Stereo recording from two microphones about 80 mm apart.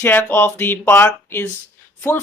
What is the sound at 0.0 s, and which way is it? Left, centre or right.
A man's voice, left.